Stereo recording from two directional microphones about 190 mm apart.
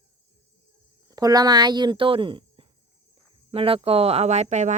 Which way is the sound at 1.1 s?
20° right (ahead or behind).